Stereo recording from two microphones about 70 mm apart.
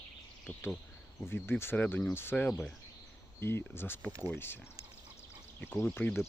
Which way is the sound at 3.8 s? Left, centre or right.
Left.